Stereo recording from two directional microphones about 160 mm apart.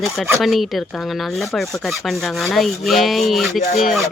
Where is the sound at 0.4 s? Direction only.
Centre (ahead or behind).